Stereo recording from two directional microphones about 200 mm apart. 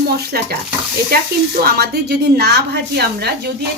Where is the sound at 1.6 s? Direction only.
50° right (ahead or behind).